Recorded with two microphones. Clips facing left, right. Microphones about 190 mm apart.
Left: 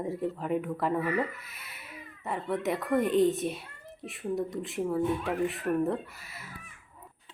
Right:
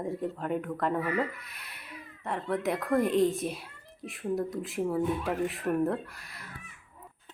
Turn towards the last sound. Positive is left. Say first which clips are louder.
# even
turn(degrees=5)  # may be behind; listen again after turning